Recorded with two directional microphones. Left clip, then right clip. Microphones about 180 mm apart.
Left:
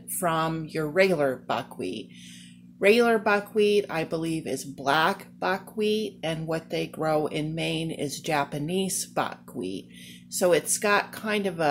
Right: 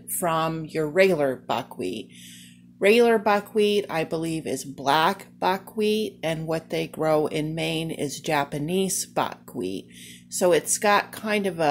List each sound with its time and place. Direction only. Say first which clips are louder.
0.2 s speech: right 2 dB; 20° right (ahead or behind)